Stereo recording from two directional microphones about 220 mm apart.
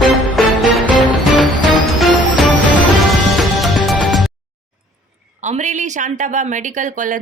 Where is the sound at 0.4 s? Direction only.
Centre (ahead or behind).